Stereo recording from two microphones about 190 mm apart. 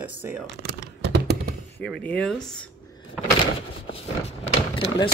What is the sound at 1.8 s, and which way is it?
Speech, 5° left (ahead or behind).